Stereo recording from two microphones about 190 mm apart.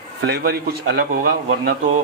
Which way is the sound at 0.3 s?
55° right (ahead or behind).